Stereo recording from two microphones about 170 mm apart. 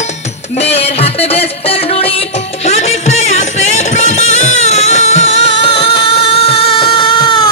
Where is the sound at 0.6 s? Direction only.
35° left (ahead or behind).